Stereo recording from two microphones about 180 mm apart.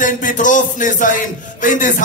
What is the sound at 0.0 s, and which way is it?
A man's voice, 45° left (ahead or behind).